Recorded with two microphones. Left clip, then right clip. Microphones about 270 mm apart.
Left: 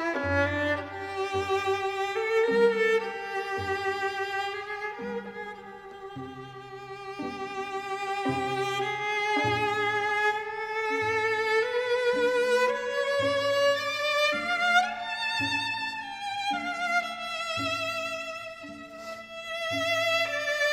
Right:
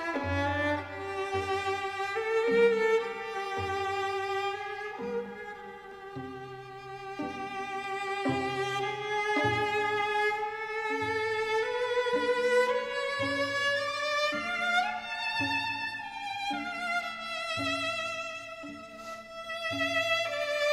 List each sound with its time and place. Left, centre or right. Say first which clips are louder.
0.0 s music: left 4 dB; left
7.2 s music: left 2 dB; left
15.5 s violin: left 2 dB; left
16.7 s music: left 4 dB; left
19.5 s music: left 2 dB; left